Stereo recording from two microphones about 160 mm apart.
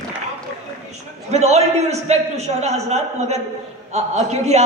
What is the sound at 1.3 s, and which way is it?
A man's voice, 45° right (ahead or behind).